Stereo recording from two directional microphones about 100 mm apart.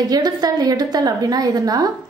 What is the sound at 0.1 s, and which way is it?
A woman's voice, 40° right (ahead or behind).